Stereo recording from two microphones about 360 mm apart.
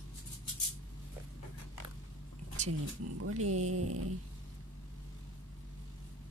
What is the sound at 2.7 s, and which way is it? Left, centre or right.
Speech, right.